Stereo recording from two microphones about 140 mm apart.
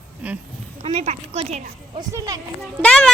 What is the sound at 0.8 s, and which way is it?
Speech, 45° right (ahead or behind).